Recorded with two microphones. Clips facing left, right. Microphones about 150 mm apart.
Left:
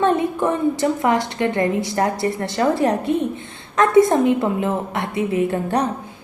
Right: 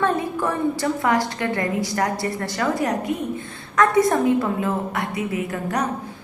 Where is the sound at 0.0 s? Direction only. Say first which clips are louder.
Left 4 dB; 20° left (ahead or behind).